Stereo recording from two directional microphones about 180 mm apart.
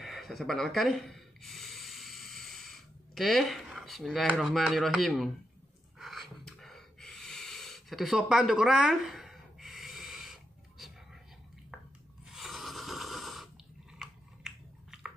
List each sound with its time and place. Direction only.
0.0 s a sound: centre (ahead or behind)
5.9 s snort: centre (ahead or behind)
12.3 s snoring: centre (ahead or behind)
13.9 s biting: centre (ahead or behind)